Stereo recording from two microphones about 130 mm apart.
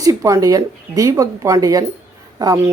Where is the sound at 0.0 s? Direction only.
25° right (ahead or behind).